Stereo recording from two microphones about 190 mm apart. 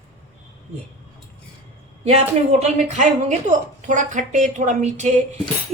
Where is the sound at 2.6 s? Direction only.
40° right (ahead or behind).